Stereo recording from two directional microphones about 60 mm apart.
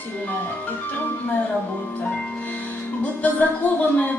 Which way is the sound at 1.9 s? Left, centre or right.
Left.